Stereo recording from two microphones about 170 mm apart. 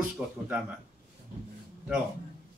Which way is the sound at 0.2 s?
5° right (ahead or behind).